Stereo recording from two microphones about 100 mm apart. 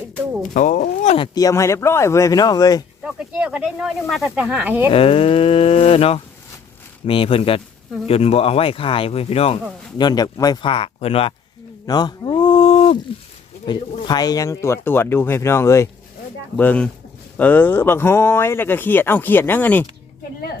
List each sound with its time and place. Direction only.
1.3 s speech: 35° left (ahead or behind)
3.0 s speech: 5° right (ahead or behind)
4.4 s speech: 15° right (ahead or behind)
4.9 s speech: 70° left (ahead or behind)
7.0 s speech: 65° left (ahead or behind)
8.0 s speech: 90° left
10.0 s speech: 45° left (ahead or behind)
10.6 s speech: 65° left (ahead or behind)
11.9 s speech: 45° left (ahead or behind); by 13.0 s 75° left (ahead or behind)
13.7 s speech: 45° left (ahead or behind)
16.6 s speech: 15° left (ahead or behind)